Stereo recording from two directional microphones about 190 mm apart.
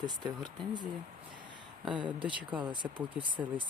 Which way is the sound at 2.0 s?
25° right (ahead or behind).